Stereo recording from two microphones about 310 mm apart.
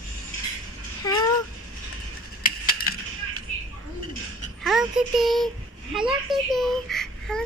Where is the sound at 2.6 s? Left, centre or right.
Left.